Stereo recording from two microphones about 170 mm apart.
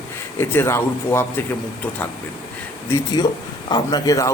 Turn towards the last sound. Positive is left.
turn(degrees=20)  # may be behind; listen again after turning